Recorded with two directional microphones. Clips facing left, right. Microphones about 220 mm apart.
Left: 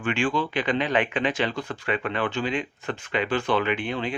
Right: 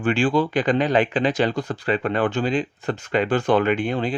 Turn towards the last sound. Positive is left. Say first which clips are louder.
# right 5 dB
turn(degrees=-40)  # may be behind; listen again after turning